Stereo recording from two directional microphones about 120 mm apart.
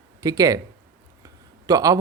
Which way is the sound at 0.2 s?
30° right (ahead or behind).